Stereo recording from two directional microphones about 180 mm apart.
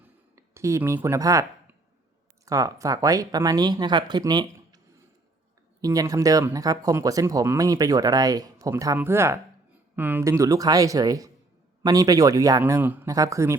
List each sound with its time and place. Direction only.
0.3 s speech: 15° right (ahead or behind)
5.8 s a man's voice: 20° right (ahead or behind)